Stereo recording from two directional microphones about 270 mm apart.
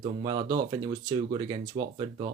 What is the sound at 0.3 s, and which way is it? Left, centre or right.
Speech, centre.